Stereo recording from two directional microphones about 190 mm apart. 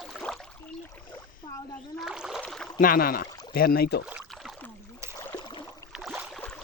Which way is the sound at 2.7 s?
50° left (ahead or behind).